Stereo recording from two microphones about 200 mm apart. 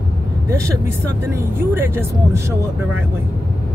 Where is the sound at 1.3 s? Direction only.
10° right (ahead or behind).